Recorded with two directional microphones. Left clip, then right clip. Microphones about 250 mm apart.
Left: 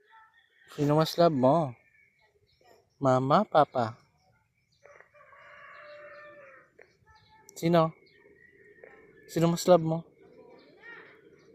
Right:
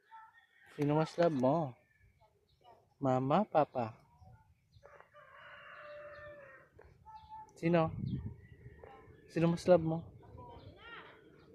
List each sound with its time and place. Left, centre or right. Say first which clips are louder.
0.9 s speech: left 8 dB; left
3.0 s speech: left 8 dB; left
7.6 s speech: left 7 dB; left
9.3 s speech: left 6 dB; left